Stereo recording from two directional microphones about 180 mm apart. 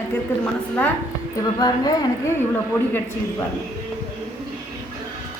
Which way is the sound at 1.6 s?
20° left (ahead or behind).